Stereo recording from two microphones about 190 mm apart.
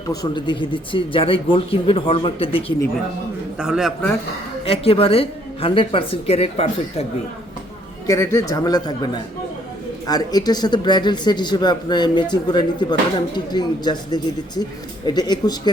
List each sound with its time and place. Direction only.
0.1 s speech: 20° left (ahead or behind)
3.6 s a man's voice: 5° right (ahead or behind)
4.6 s a woman's voice: 30° left (ahead or behind)
8.0 s speech: 15° left (ahead or behind)